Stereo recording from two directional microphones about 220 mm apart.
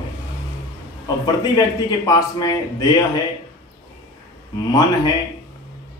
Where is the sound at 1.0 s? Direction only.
15° left (ahead or behind).